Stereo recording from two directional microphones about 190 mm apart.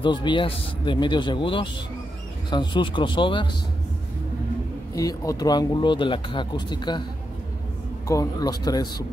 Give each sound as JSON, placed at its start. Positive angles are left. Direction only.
{"t": 0.0, "sound": "speech", "side_deg": 25}
{"t": 4.9, "sound": "speech", "side_deg": 15}
{"t": 8.1, "sound": "speech", "side_deg": 20}